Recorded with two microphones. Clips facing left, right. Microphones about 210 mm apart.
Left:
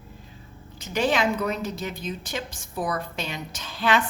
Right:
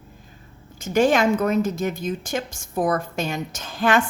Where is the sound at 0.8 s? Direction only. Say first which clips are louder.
Right 6 dB; 45° right (ahead or behind).